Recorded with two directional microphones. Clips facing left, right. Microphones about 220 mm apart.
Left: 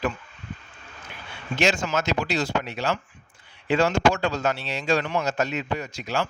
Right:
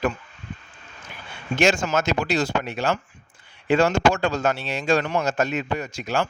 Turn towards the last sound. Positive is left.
turn(degrees=-50)  # may be behind; listen again after turning